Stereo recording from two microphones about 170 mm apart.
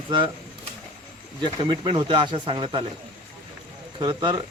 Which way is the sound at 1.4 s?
30° right (ahead or behind).